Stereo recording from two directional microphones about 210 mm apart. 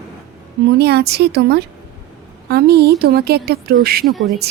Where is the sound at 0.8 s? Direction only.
50° right (ahead or behind).